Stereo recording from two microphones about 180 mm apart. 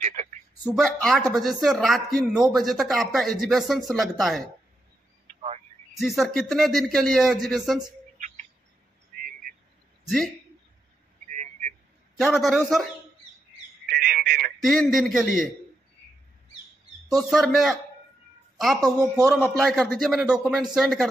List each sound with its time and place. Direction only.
0.0 s a sound: 40° right (ahead or behind)
0.7 s speech: centre (ahead or behind)
5.9 s speech: centre (ahead or behind)
10.0 s speech: centre (ahead or behind)
12.4 s speech: centre (ahead or behind)
13.8 s telephone: 65° right (ahead or behind)
14.6 s speech: centre (ahead or behind)
17.3 s speech: centre (ahead or behind)
18.8 s speech: 20° right (ahead or behind)
19.4 s speech: 5° left (ahead or behind)